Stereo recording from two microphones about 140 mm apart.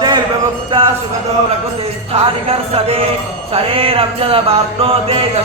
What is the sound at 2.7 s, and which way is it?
Music, 45° right (ahead or behind).